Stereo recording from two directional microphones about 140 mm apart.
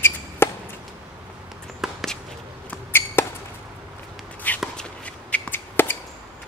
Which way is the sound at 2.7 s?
15° left (ahead or behind).